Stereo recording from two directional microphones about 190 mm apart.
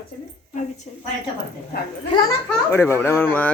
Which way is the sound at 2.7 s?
10° left (ahead or behind).